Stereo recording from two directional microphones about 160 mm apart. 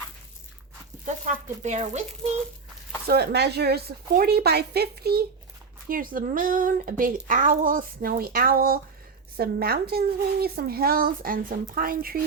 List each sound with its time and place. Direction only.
1.0 s speech: 50° right (ahead or behind)
3.1 s speech: 90° right
5.9 s a woman's voice: 60° right (ahead or behind)